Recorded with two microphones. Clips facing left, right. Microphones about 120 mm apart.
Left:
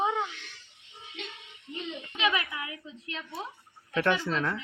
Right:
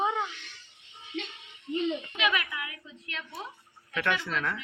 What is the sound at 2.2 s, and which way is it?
A woman's voice, 30° left (ahead or behind).